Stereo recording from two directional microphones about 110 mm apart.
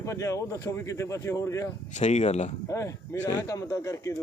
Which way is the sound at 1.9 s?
90° left.